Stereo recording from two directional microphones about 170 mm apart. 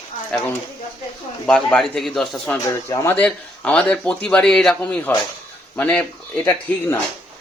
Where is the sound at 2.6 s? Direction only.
20° left (ahead or behind).